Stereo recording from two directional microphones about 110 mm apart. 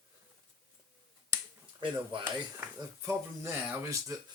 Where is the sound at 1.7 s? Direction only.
50° right (ahead or behind).